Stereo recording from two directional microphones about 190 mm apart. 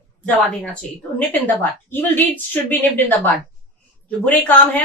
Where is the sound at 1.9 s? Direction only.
10° left (ahead or behind).